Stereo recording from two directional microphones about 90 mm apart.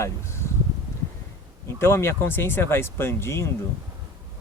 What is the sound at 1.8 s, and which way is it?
Speech, 30° left (ahead or behind).